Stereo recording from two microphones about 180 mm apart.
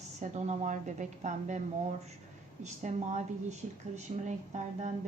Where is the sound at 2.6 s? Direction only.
40° right (ahead or behind).